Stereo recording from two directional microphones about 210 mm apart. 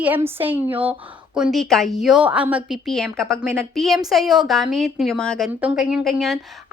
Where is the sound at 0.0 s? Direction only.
10° right (ahead or behind).